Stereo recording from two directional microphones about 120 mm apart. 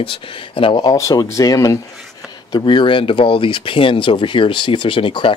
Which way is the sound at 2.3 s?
40° left (ahead or behind).